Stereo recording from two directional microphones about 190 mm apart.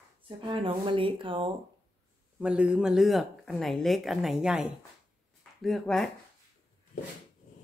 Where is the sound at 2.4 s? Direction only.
5° right (ahead or behind).